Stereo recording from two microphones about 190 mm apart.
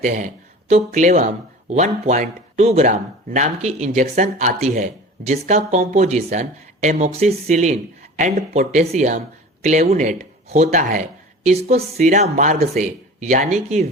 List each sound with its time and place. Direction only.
0.0 s speech: 40° right (ahead or behind)